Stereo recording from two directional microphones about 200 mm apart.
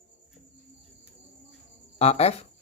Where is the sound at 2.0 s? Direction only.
30° left (ahead or behind).